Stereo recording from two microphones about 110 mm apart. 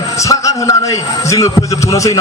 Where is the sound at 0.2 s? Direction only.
30° left (ahead or behind).